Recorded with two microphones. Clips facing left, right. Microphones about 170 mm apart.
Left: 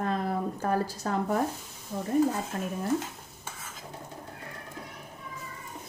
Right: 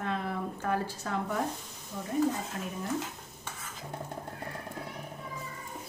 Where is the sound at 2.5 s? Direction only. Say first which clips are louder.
Left 4 dB; 40° left (ahead or behind).